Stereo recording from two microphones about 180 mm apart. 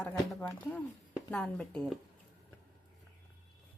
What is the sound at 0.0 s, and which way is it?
Speech, 5° left (ahead or behind).